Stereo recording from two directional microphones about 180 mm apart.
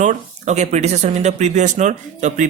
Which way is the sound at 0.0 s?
40° right (ahead or behind).